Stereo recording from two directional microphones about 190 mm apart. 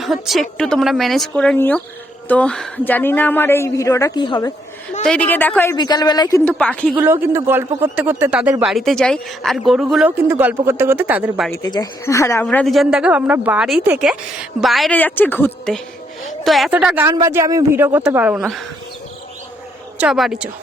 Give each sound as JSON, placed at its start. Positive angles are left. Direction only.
{"t": 0.0, "sound": "a woman's voice", "side_deg": 0}
{"t": 5.0, "sound": "a woman's voice", "side_deg": 5}
{"t": 5.7, "sound": "speech", "side_deg": 20}
{"t": 6.4, "sound": "speech", "side_deg": 5}
{"t": 6.9, "sound": "speech", "side_deg": -10}
{"t": 11.5, "sound": "a woman's voice", "side_deg": 20}
{"t": 12.5, "sound": "a woman's voice", "side_deg": 5}
{"t": 20.0, "sound": "speech", "side_deg": 0}